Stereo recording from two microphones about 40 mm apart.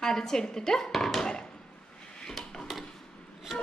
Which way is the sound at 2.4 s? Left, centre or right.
Centre.